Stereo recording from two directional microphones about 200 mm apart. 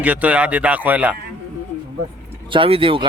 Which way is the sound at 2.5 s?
25° right (ahead or behind).